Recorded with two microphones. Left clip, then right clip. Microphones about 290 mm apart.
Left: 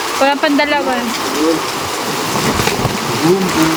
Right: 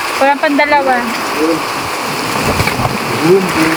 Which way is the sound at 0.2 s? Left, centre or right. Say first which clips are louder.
Right 2 dB; centre.